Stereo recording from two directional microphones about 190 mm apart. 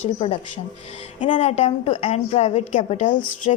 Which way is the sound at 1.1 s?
40° left (ahead or behind).